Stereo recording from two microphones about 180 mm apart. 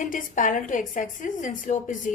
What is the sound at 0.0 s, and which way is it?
A woman's voice, 45° left (ahead or behind).